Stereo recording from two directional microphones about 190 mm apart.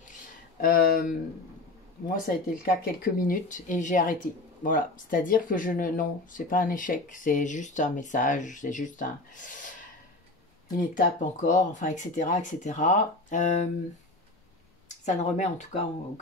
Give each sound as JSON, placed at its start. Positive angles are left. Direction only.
{"t": 0.6, "sound": "speech", "side_deg": 50}
{"t": 11.0, "sound": "speech", "side_deg": 40}
{"t": 15.0, "sound": "speech", "side_deg": 40}